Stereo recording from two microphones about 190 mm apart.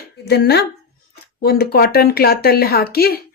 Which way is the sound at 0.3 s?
60° left (ahead or behind).